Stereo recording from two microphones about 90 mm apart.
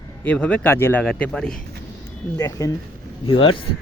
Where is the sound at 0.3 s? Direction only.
15° left (ahead or behind).